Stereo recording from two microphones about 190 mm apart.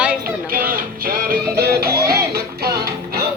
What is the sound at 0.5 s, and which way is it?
Music, 50° right (ahead or behind).